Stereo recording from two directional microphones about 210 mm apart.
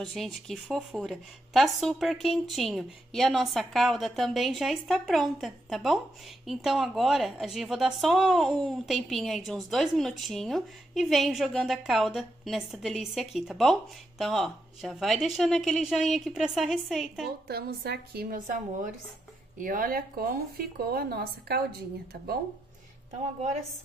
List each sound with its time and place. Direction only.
0.0 s a woman's voice: centre (ahead or behind)
17.5 s speech: 50° right (ahead or behind)